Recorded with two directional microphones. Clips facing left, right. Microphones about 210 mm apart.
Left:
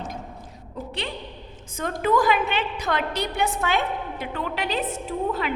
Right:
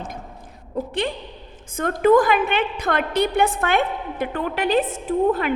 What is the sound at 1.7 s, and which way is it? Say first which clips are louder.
A woman's voice: right 7 dB; 55° right (ahead or behind).